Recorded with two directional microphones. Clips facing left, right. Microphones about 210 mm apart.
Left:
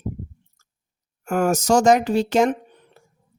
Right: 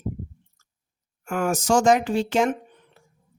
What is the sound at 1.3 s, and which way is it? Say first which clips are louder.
Speech: left 4 dB; 40° left (ahead or behind).